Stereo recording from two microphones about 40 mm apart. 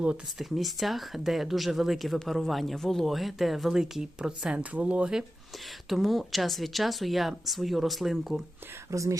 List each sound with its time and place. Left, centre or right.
0.3 s speech: centre
4.5 s speech: right
5.9 s speech: centre